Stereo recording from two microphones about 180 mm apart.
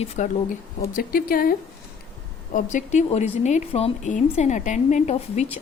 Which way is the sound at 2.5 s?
45° left (ahead or behind).